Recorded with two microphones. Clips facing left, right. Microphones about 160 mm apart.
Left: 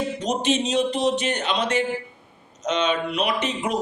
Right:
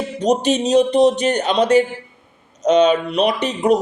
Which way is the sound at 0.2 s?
40° right (ahead or behind).